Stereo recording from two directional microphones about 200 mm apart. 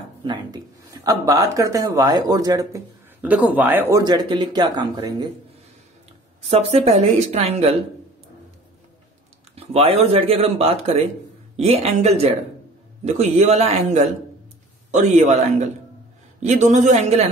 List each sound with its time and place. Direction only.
0.2 s speech: 25° right (ahead or behind)
6.5 s speech: 30° right (ahead or behind)
9.6 s speech: 30° right (ahead or behind)